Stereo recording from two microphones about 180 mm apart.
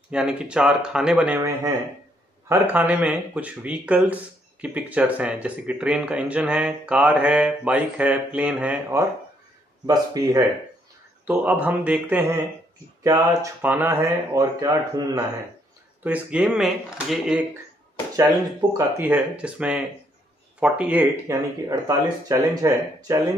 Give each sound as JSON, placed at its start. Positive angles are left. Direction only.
{"t": 0.1, "sound": "speech", "side_deg": -5}
{"t": 2.4, "sound": "speech", "side_deg": -15}
{"t": 9.8, "sound": "speech", "side_deg": -20}
{"t": 11.2, "sound": "speech", "side_deg": -10}
{"t": 16.0, "sound": "speech", "side_deg": -5}
{"t": 18.7, "sound": "speech", "side_deg": -20}
{"t": 19.0, "sound": "speech", "side_deg": -5}